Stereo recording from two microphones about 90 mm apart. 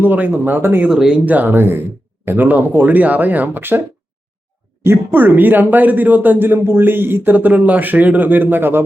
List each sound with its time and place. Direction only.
0.0 s speech: 20° right (ahead or behind)
0.9 s speech: 5° right (ahead or behind); by 8.8 s 25° right (ahead or behind)